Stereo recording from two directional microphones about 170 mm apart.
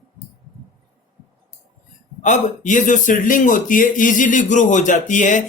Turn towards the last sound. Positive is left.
turn(degrees=45)  # may be behind; listen again after turning